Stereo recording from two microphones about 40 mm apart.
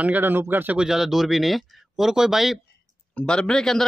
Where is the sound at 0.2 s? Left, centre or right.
Right.